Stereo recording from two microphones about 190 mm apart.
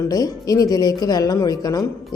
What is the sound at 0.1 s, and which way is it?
A woman's voice, 20° left (ahead or behind).